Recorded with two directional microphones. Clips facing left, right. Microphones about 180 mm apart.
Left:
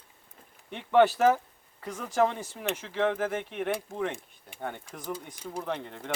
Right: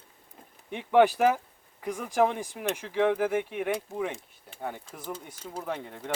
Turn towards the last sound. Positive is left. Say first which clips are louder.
# even
turn(degrees=-5)  # may be behind; listen again after turning